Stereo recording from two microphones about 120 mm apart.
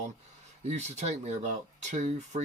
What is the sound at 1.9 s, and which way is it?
Speech, 90° right.